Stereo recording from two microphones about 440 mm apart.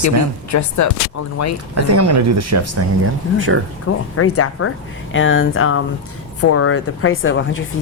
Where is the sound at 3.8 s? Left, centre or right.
Left.